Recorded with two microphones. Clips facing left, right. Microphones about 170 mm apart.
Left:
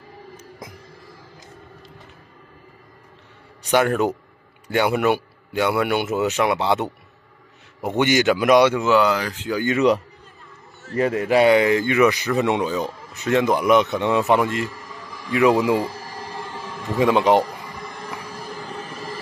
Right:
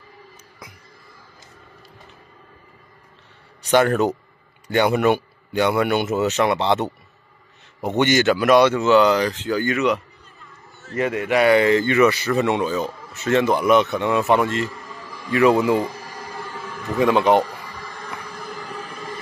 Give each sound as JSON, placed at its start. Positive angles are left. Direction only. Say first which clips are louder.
{"t": 3.6, "sound": "a man's voice", "louder": "right 2 dB", "side_deg": 10}
{"t": 9.7, "sound": "speech", "louder": "left 6 dB", "side_deg": 35}
{"t": 11.4, "sound": "a man's voice", "louder": "right 3 dB", "side_deg": 10}
{"t": 16.3, "sound": "a sound", "louder": "right 1 dB", "side_deg": 10}